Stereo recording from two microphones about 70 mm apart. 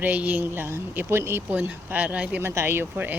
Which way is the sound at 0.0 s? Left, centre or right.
Right.